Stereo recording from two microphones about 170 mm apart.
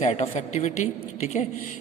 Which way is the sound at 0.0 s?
40° left (ahead or behind).